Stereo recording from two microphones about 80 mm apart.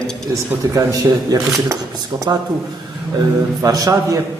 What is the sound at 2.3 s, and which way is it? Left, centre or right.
Speech, right.